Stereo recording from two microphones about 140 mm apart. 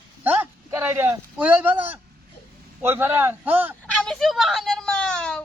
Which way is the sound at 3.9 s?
5° left (ahead or behind).